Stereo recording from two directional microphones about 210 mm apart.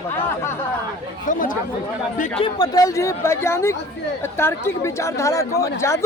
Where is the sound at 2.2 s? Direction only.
25° left (ahead or behind).